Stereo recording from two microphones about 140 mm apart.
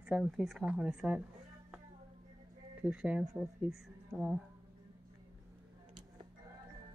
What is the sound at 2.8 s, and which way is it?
Speech, 10° right (ahead or behind).